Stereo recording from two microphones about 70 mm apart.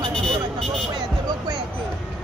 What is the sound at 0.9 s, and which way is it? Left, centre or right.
Music, right.